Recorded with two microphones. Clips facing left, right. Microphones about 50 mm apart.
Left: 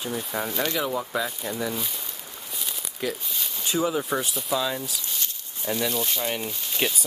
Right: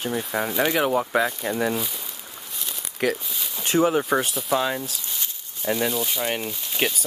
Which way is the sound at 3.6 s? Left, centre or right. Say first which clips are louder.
Right 5 dB; right.